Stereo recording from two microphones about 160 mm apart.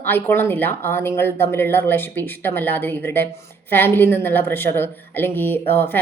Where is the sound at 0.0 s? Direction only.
15° left (ahead or behind).